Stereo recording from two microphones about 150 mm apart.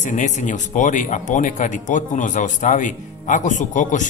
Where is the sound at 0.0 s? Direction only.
55° left (ahead or behind).